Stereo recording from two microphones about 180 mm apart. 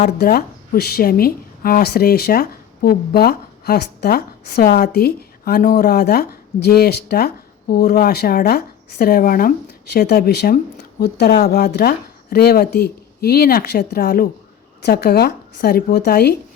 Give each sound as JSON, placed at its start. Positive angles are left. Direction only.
{"t": 0.2, "sound": "speech", "side_deg": 60}
{"t": 9.9, "sound": "speech", "side_deg": 65}
{"t": 11.0, "sound": "speech", "side_deg": 70}